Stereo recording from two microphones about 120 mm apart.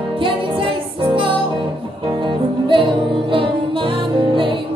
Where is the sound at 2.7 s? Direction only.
45° right (ahead or behind).